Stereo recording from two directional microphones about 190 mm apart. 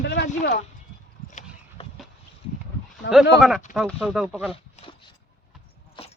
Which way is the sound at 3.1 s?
Centre (ahead or behind).